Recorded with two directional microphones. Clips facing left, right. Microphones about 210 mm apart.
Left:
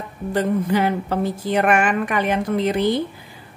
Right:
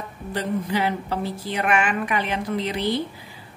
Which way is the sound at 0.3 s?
50° left (ahead or behind).